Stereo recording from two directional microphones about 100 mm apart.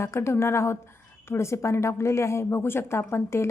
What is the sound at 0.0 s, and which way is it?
A woman's voice, 25° left (ahead or behind).